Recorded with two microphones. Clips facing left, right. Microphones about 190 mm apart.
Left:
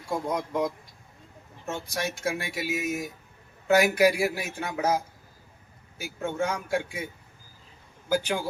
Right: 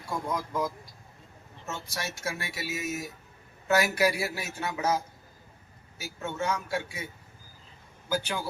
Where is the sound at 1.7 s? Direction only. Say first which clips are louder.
Left 6 dB; 55° left (ahead or behind).